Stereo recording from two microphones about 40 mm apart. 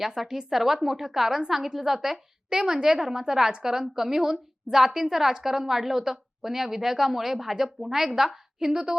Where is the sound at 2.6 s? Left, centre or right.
Right.